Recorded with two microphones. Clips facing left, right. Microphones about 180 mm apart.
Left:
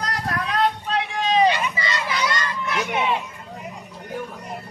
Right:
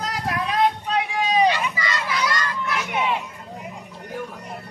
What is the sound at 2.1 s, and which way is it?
Crowd, centre (ahead or behind).